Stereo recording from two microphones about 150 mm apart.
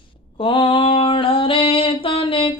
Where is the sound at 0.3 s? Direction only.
35° left (ahead or behind).